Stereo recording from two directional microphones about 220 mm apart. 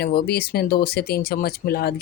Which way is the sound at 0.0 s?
45° left (ahead or behind).